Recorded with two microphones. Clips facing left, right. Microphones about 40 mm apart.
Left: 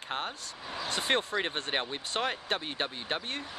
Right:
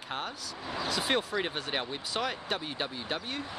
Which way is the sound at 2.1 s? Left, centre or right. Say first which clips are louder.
Left 1 dB; left.